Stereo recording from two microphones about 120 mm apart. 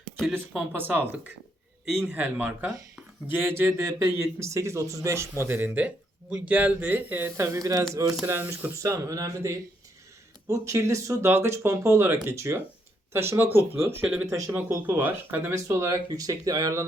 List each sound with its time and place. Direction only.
0.3 s speech: 15° right (ahead or behind)